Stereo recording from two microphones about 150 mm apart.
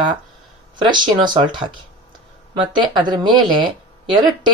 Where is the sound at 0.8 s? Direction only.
30° right (ahead or behind).